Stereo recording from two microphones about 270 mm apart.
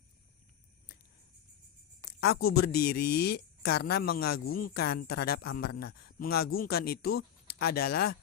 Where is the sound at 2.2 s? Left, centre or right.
Left.